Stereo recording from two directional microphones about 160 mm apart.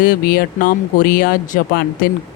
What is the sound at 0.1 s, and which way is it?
Speech, 70° left (ahead or behind).